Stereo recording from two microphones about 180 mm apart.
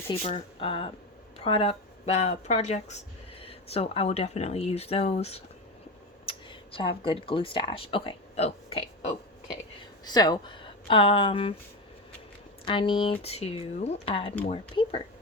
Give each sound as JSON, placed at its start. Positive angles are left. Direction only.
{"t": 0.1, "sound": "speech", "side_deg": 35}
{"t": 10.0, "sound": "speech", "side_deg": 20}
{"t": 12.6, "sound": "speech", "side_deg": 25}